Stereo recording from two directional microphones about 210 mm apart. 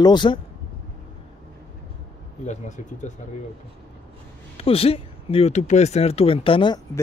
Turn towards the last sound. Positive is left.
turn(degrees=25)  # may be behind; listen again after turning